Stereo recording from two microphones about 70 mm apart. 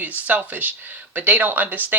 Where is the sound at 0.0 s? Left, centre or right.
Right.